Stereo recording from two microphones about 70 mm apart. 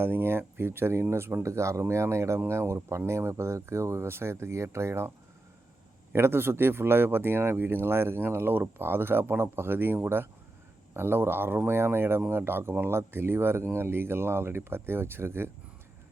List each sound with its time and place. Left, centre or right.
0.0 s speech: right
6.1 s speech: right